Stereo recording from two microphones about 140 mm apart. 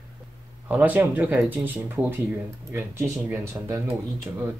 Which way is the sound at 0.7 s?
10° right (ahead or behind).